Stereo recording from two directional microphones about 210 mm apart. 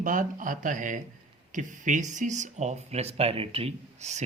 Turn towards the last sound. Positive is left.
turn(degrees=-30)  # may be behind; listen again after turning